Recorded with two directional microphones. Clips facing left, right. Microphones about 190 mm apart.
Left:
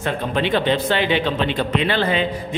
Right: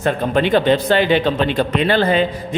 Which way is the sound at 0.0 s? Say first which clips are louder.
Right 5 dB; 45° right (ahead or behind).